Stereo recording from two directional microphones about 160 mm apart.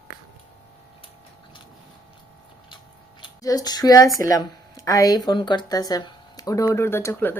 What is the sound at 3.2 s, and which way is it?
Speech, 20° left (ahead or behind).